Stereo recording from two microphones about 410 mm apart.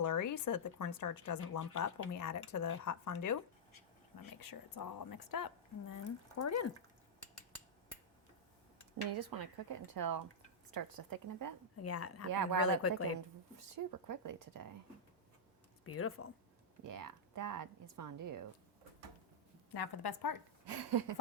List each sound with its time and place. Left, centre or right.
0.0 s speech: left
5.9 s speech: left
9.1 s speech: right
11.8 s speech: left
13.7 s speech: right
15.8 s speech: left
16.8 s speech: right
19.7 s a woman's voice: left
20.7 s a sound: right